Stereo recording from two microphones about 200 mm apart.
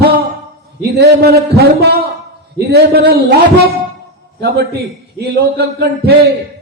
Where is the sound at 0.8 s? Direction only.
55° right (ahead or behind).